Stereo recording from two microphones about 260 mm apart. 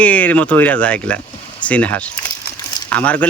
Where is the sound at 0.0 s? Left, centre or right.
Centre.